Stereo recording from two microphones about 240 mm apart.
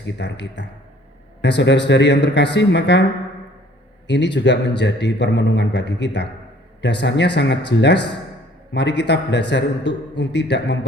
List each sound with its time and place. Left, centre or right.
0.0 s a man's voice: left